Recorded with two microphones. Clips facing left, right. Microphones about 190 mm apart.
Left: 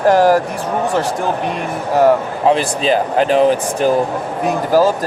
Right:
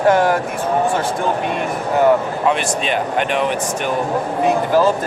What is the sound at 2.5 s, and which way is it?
Speech, 35° left (ahead or behind).